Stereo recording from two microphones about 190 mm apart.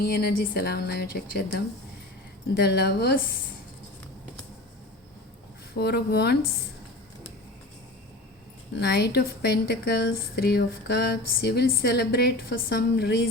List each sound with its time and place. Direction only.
0.0 s speech: 55° left (ahead or behind)
5.7 s speech: 60° left (ahead or behind)
8.7 s speech: 60° left (ahead or behind)